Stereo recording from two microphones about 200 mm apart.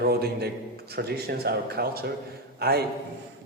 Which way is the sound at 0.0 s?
50° right (ahead or behind).